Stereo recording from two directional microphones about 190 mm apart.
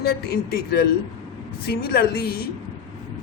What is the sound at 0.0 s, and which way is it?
A man's voice, 55° left (ahead or behind).